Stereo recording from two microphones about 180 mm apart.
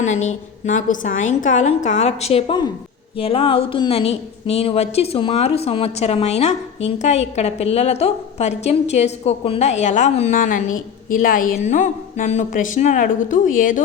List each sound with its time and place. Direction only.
0.0 s speech: 40° left (ahead or behind)